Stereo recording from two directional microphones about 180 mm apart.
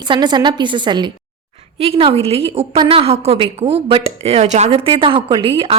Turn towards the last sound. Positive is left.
turn(degrees=-30)  # may be behind; listen again after turning